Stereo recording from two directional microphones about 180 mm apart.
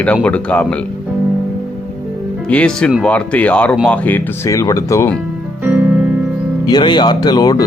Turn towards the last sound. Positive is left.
turn(degrees=20)  # may be behind; listen again after turning